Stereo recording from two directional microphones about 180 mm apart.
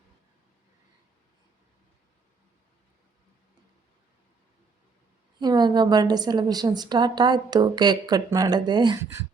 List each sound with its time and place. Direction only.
5.4 s a woman's voice: 25° right (ahead or behind)